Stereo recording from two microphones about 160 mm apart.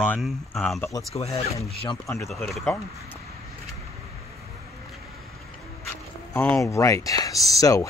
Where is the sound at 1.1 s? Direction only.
40° left (ahead or behind).